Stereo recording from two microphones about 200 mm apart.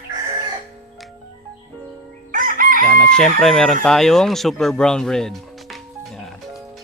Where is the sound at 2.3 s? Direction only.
45° right (ahead or behind).